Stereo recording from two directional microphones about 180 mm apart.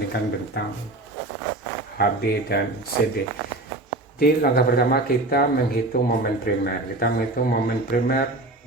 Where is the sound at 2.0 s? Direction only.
65° left (ahead or behind).